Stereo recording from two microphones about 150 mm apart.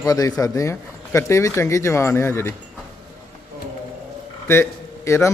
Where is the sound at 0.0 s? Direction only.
25° left (ahead or behind).